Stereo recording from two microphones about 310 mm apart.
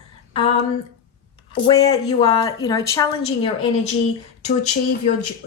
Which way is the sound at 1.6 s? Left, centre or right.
Centre.